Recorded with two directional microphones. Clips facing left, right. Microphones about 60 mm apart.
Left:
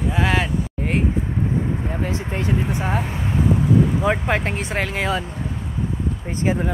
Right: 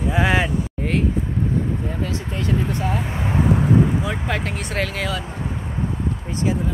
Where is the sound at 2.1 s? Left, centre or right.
Left.